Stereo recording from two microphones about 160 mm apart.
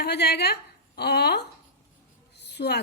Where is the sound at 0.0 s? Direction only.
90° left.